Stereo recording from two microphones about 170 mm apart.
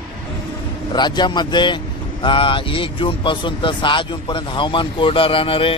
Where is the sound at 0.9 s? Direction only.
25° left (ahead or behind).